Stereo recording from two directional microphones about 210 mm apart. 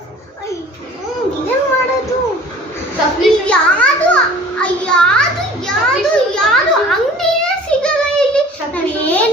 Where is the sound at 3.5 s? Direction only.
5° left (ahead or behind).